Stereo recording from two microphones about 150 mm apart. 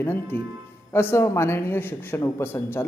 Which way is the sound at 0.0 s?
15° left (ahead or behind).